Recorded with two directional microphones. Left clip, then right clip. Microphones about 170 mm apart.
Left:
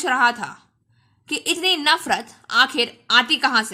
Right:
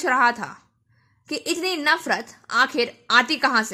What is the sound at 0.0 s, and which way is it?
A woman's voice, 15° right (ahead or behind).